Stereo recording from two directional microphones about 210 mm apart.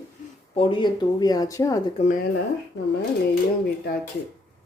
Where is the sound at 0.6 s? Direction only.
25° left (ahead or behind).